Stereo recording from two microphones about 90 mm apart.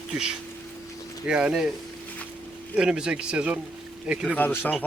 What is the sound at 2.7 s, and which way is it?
Speech, 10° right (ahead or behind).